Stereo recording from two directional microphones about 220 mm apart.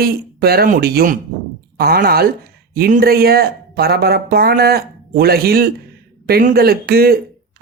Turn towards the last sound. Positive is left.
turn(degrees=-45)  # may be behind; listen again after turning